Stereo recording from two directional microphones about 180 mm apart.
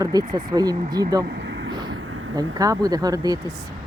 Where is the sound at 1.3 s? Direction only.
85° right.